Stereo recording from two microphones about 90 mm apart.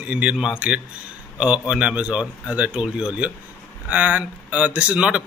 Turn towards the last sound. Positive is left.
turn(degrees=-15)  # may be behind; listen again after turning